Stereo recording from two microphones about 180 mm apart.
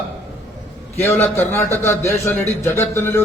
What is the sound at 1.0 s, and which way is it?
A man's voice, 10° left (ahead or behind).